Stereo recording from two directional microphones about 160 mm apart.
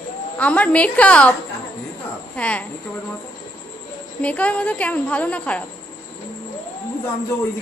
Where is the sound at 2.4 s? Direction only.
10° left (ahead or behind).